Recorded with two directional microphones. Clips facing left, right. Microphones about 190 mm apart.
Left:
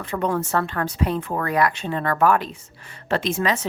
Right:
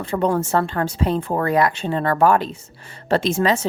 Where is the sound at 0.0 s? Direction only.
30° right (ahead or behind).